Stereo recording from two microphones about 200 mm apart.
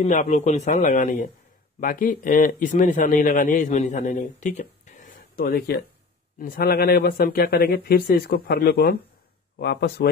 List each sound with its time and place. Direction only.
0.0 s speech: 35° left (ahead or behind)
4.2 s a sound: 35° left (ahead or behind)
6.4 s speech: 50° left (ahead or behind)